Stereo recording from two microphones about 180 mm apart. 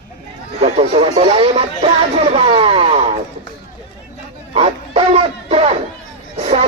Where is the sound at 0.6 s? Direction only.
35° right (ahead or behind).